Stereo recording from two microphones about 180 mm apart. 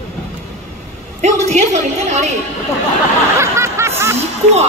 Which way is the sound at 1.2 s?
40° right (ahead or behind).